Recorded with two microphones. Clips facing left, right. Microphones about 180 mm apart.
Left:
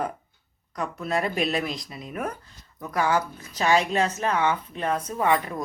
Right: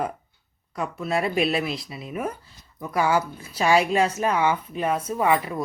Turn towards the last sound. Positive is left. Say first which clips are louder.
# right 2 dB
turn(degrees=-5)  # may be behind; listen again after turning